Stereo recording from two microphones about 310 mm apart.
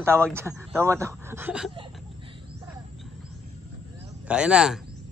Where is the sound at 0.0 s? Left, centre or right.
Centre.